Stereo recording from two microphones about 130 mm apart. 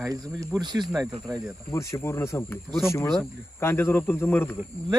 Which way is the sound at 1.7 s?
20° left (ahead or behind).